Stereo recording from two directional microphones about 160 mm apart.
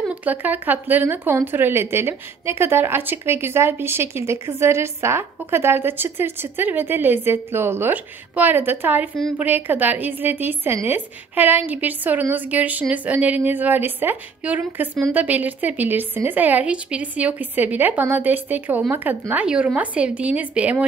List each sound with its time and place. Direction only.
0.0 s speech: 10° right (ahead or behind)